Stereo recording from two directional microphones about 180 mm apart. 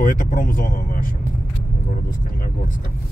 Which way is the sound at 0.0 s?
45° left (ahead or behind).